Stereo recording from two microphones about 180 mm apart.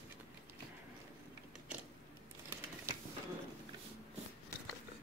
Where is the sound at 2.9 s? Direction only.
15° right (ahead or behind).